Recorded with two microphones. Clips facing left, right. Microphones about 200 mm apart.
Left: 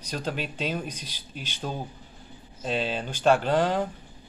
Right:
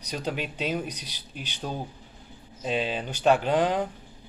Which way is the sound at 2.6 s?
10° right (ahead or behind).